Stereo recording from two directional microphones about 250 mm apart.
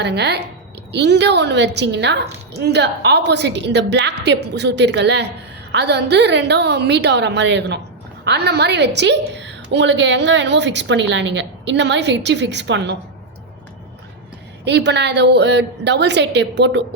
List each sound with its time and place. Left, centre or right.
0.0 s a woman's voice: right
14.6 s a woman's voice: right